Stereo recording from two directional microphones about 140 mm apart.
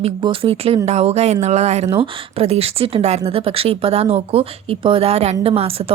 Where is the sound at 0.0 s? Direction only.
40° right (ahead or behind).